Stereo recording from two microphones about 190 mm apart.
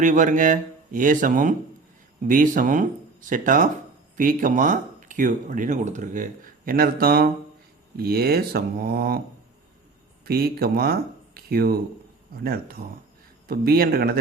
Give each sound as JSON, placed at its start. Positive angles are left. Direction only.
{"t": 0.0, "sound": "speech", "side_deg": -40}
{"t": 10.2, "sound": "speech", "side_deg": -55}